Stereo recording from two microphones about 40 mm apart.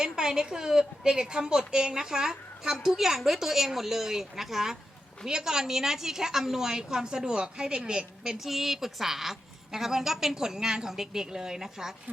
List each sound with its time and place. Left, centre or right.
0.0 s a woman's voice: centre
8.4 s a woman's voice: centre